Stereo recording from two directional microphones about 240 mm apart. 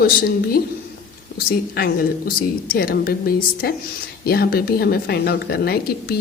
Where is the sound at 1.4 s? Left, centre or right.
Left.